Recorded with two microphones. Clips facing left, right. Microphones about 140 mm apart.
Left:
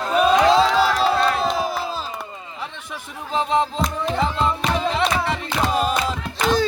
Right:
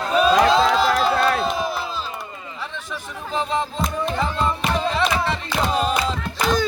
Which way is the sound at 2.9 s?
20° left (ahead or behind).